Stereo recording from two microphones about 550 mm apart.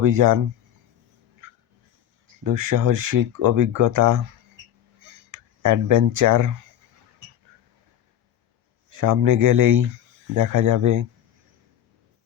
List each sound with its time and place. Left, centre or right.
0.0 s speech: right
2.4 s speech: right
4.9 s a sound: right
9.0 s speech: right